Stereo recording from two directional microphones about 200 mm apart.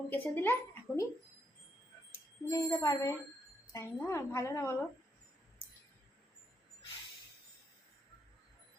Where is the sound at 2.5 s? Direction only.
15° left (ahead or behind).